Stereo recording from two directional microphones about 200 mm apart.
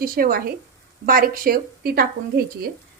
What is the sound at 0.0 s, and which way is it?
Speech, 45° right (ahead or behind).